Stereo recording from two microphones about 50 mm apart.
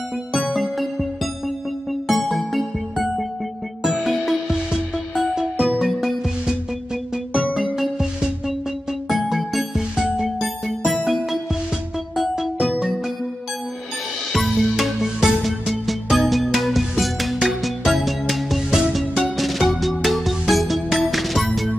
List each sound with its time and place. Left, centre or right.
0.3 s music: centre
7.5 s music: centre
14.3 s music: centre